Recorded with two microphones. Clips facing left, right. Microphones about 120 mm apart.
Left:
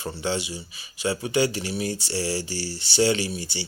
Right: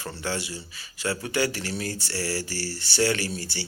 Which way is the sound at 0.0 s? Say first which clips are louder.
Left 3 dB; 20° left (ahead or behind).